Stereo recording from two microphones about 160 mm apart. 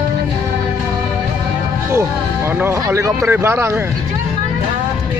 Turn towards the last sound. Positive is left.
turn(degrees=-15)  # may be behind; listen again after turning